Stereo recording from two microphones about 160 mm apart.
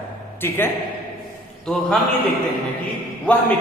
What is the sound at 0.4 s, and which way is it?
Speech, 15° left (ahead or behind).